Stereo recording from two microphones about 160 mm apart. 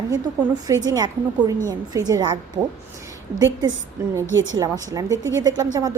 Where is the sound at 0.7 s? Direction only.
20° right (ahead or behind).